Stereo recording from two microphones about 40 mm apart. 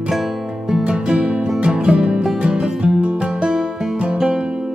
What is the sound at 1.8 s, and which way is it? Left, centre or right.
Music, centre.